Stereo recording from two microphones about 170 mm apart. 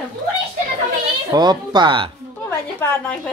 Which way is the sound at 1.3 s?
25° right (ahead or behind).